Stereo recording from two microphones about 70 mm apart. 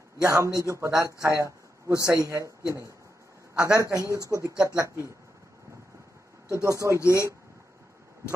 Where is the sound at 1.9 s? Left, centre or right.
Left.